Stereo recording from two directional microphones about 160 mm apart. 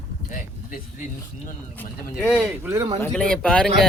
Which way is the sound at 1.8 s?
10° left (ahead or behind).